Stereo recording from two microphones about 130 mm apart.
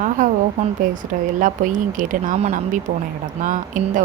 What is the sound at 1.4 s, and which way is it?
Speech, 80° right.